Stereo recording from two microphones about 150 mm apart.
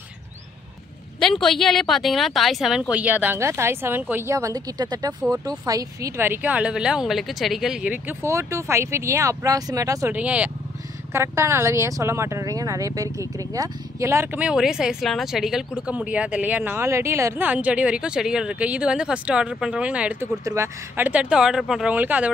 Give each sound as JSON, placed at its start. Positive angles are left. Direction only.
{"t": 1.2, "sound": "speech", "side_deg": 5}
{"t": 10.1, "sound": "speech", "side_deg": -10}
{"t": 20.4, "sound": "speech", "side_deg": -20}